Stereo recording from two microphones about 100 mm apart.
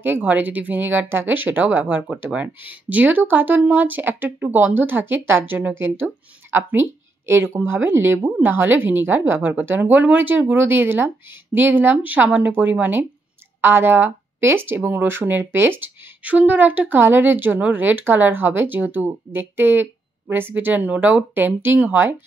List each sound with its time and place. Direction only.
0.0 s speech: 20° right (ahead or behind)